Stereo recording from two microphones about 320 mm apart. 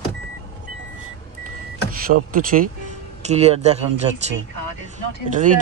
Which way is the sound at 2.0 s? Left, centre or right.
Right.